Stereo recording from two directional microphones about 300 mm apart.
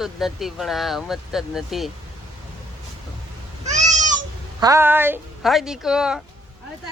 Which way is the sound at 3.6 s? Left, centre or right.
Right.